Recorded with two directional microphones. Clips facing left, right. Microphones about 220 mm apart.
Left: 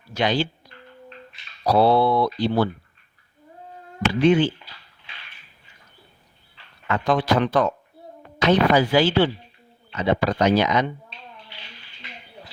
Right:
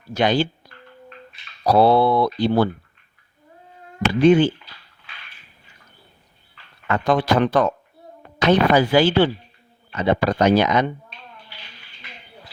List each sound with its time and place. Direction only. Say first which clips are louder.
0.1 s speech: right 3 dB; 50° right (ahead or behind)
1.6 s speech: right 2 dB; 55° right (ahead or behind)
4.2 s speech: right 4 dB; 45° right (ahead or behind)
6.8 s speech: right 2 dB; 50° right (ahead or behind)